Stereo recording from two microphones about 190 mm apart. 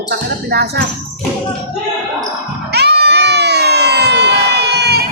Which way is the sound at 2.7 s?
60° right (ahead or behind).